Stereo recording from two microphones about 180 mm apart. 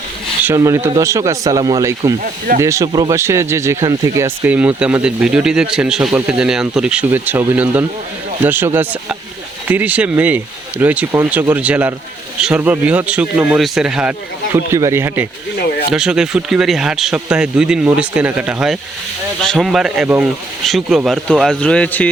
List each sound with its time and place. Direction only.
0.4 s speech: 15° right (ahead or behind); by 22.1 s 5° left (ahead or behind)